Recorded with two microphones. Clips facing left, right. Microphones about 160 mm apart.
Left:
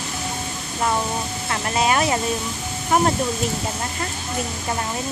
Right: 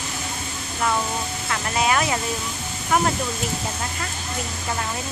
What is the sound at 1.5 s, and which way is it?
Speech, 25° left (ahead or behind).